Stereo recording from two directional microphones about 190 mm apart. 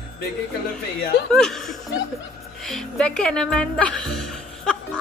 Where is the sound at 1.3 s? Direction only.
Centre (ahead or behind).